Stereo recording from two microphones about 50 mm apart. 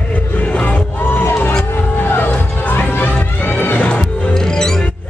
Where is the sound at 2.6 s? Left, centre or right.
Left.